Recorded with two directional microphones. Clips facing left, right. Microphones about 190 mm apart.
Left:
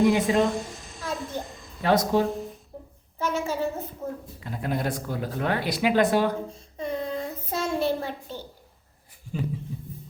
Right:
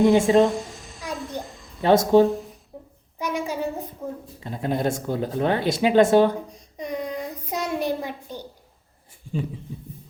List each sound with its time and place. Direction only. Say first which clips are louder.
0.1 s speech: right 5 dB; 25° right (ahead or behind)
0.3 s a sound: right 5 dB; centre (ahead or behind)
1.8 s speech: right 6 dB; 25° right (ahead or behind)
2.3 s a sound: right 2 dB; centre (ahead or behind)
3.2 s a child's voice: even; 15° right (ahead or behind)
4.4 s speech: right 5 dB; 25° right (ahead or behind)
6.5 s child singing: even; 15° right (ahead or behind)